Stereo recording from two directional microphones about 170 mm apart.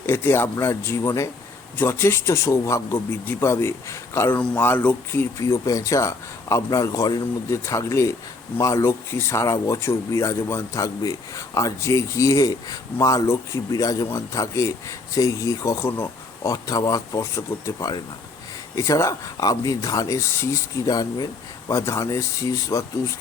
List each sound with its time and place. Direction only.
0.0 s speech: 15° left (ahead or behind)